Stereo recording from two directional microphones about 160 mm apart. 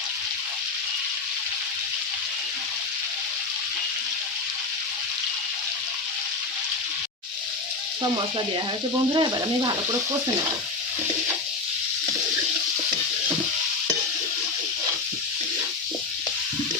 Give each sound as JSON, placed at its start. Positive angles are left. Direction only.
{"t": 9.1, "sound": "speech", "side_deg": -25}